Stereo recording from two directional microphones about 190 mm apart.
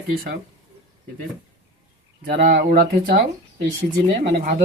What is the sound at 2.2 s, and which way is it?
Speech, 50° right (ahead or behind).